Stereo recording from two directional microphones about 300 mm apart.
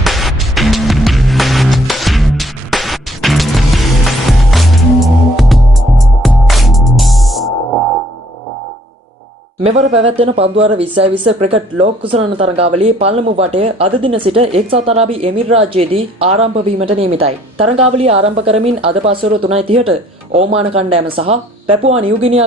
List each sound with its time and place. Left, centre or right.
0.0 s music: centre
9.6 s speech: right